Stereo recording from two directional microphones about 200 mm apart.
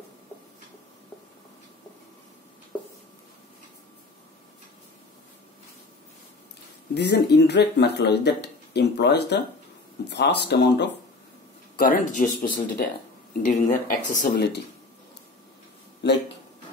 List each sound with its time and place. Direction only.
6.9 s speech: 55° left (ahead or behind)
11.7 s speech: 45° left (ahead or behind)
16.0 s speech: 60° left (ahead or behind)